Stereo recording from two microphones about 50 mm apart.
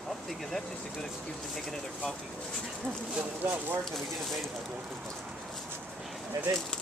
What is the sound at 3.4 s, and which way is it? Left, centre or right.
Speech, right.